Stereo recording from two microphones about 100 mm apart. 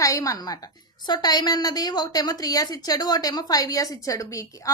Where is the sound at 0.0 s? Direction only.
35° left (ahead or behind).